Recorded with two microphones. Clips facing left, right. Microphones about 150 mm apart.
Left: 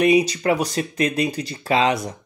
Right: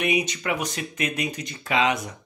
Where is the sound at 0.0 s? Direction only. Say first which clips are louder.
Left 8 dB; 35° left (ahead or behind).